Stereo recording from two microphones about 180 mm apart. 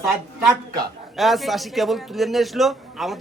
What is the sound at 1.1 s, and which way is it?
A man's voice, centre (ahead or behind).